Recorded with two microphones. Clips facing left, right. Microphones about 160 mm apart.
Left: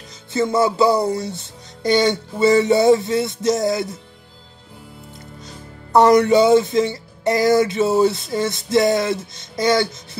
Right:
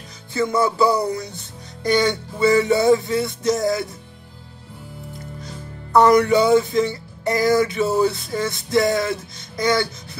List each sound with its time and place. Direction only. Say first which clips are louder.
0.3 s music: left 2 dB; 25° left (ahead or behind)
5.9 s music: left 2 dB; 20° left (ahead or behind)